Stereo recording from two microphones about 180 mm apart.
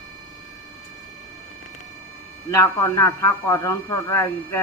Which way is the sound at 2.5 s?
15° left (ahead or behind).